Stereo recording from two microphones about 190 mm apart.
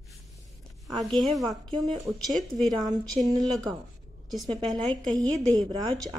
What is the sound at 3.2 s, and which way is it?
Speech, 20° right (ahead or behind).